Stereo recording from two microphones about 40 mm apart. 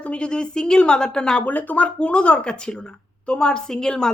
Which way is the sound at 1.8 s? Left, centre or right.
Left.